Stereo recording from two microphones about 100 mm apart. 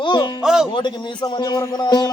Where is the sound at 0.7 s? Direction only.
50° left (ahead or behind).